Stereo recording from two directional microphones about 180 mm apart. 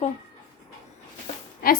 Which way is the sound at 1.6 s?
55° left (ahead or behind).